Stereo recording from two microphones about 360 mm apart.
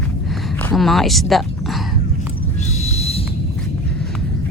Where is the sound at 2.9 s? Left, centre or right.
Centre.